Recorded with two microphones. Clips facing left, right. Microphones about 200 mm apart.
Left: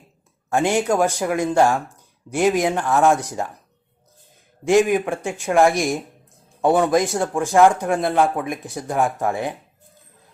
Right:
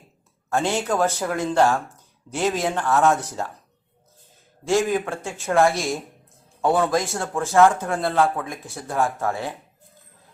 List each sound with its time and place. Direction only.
0.5 s a man's voice: 15° left (ahead or behind)
4.6 s a man's voice: 15° left (ahead or behind)